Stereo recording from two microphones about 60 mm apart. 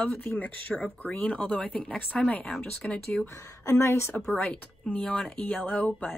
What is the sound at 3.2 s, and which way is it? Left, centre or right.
Speech, left.